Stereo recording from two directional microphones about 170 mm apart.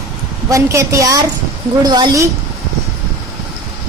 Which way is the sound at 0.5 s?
20° right (ahead or behind).